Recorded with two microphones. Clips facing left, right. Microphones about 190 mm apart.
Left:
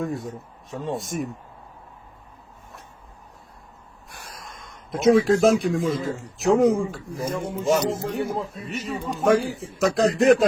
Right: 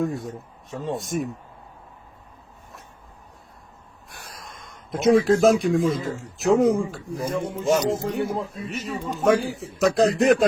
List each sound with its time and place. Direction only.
0.7 s a man's voice: centre (ahead or behind)
4.4 s a man's voice: centre (ahead or behind)